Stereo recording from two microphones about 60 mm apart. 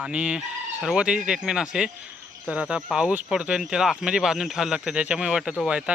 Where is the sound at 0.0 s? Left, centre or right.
Centre.